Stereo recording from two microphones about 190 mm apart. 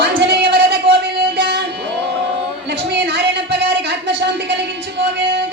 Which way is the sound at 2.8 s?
60° right (ahead or behind).